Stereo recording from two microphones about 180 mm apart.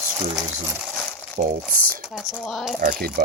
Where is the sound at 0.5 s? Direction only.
10° right (ahead or behind).